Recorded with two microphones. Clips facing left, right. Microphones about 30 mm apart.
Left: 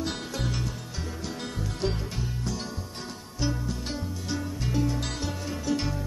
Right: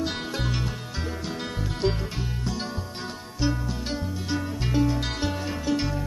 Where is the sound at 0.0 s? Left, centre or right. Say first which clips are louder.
Right 3 dB; centre.